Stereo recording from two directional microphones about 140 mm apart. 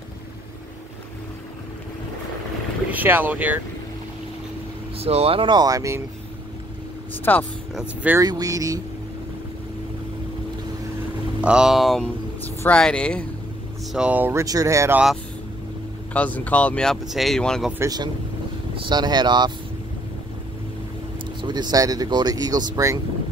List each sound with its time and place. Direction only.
2.9 s speech: 15° right (ahead or behind)
4.9 s speech: 45° right (ahead or behind); by 6.0 s 20° right (ahead or behind)
7.3 s speech: 10° left (ahead or behind)
8.2 s speech: 25° right (ahead or behind)
11.4 s speech: 5° right (ahead or behind)
13.9 s speech: 10° right (ahead or behind)
16.1 s speech: 10° left (ahead or behind)
17.7 s speech: 25° right (ahead or behind)
21.4 s speech: 30° right (ahead or behind)